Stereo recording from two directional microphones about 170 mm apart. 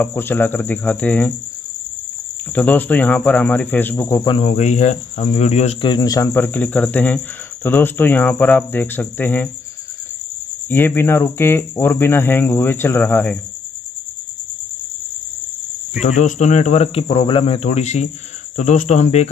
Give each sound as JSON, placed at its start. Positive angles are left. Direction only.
{"t": 0.0, "sound": "speech", "side_deg": 10}
{"t": 2.5, "sound": "speech", "side_deg": 10}
{"t": 4.3, "sound": "cricket", "side_deg": 40}
{"t": 5.9, "sound": "speech", "side_deg": 25}
{"t": 10.7, "sound": "speech", "side_deg": 10}
{"t": 16.0, "sound": "cricket", "side_deg": 45}
{"t": 18.6, "sound": "speech", "side_deg": 45}